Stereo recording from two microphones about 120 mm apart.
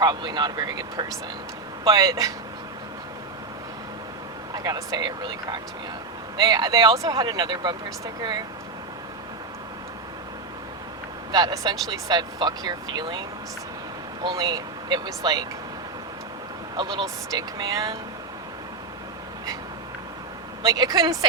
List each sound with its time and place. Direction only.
0.0 s speech: 35° right (ahead or behind)
4.5 s speech: 30° right (ahead or behind)
11.3 s speech: 35° right (ahead or behind)
14.3 s speech: 35° right (ahead or behind)
16.7 s speech: 40° right (ahead or behind)
20.7 s speech: 30° right (ahead or behind)